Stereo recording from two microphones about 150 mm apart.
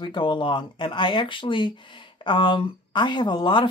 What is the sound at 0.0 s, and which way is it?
Speech, 30° left (ahead or behind).